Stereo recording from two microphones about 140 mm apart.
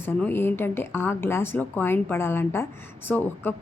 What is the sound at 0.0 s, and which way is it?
A woman's voice, 15° left (ahead or behind).